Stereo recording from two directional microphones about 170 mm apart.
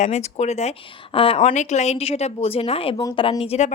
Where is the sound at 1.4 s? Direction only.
45° left (ahead or behind).